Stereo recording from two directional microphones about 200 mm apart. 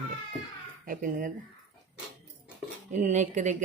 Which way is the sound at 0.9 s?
40° right (ahead or behind).